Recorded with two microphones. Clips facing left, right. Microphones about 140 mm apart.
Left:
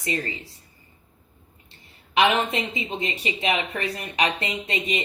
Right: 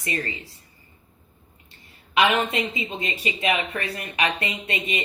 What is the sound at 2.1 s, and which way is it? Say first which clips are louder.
A woman's voice: even; 25° left (ahead or behind).